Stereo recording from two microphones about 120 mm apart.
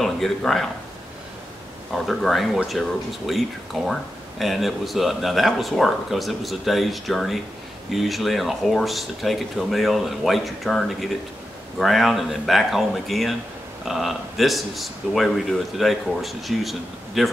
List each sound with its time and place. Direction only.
0.0 s speech: 5° left (ahead or behind)
2.0 s speech: centre (ahead or behind)